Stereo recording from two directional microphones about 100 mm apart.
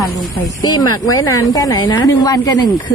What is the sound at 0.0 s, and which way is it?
Speech, 40° left (ahead or behind).